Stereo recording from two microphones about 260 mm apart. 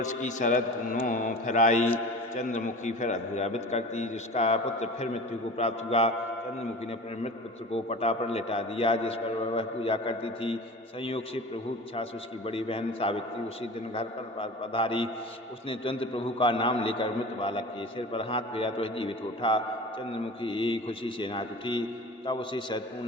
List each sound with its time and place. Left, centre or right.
0.0 s a man's voice: left
7.7 s a man's voice: left
12.5 s a man's voice: left